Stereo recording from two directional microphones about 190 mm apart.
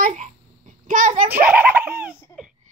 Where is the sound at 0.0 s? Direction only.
40° right (ahead or behind).